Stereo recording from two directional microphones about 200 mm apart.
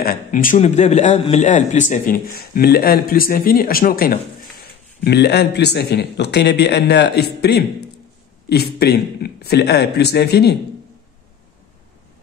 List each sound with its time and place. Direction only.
0.0 s a man's voice: 45° left (ahead or behind)